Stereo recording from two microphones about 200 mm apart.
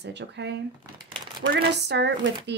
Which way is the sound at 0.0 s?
60° right (ahead or behind).